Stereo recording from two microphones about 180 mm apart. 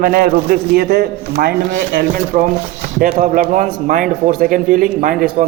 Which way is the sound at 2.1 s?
45° right (ahead or behind).